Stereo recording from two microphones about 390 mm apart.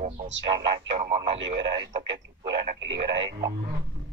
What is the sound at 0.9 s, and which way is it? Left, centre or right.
Speech, centre.